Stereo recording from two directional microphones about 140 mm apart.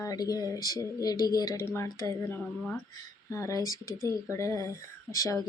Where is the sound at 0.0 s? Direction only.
25° left (ahead or behind).